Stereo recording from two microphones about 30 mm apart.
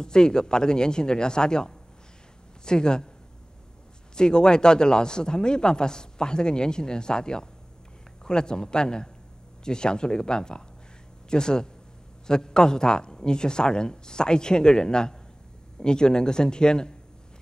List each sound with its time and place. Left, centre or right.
0.0 s speech: left
4.1 s speech: left